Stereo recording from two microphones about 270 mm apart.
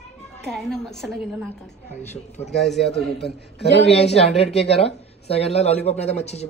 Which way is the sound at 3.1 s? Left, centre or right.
Left.